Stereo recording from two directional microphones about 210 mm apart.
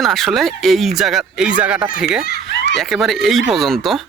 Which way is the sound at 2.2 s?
45° left (ahead or behind).